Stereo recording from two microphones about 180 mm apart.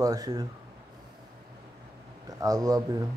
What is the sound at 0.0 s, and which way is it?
Speech, 20° right (ahead or behind).